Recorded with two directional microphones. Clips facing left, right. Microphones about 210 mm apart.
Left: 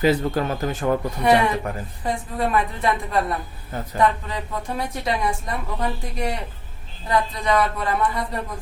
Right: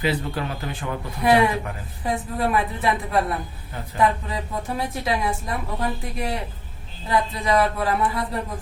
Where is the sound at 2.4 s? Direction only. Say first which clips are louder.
Left 1 dB; 5° right (ahead or behind).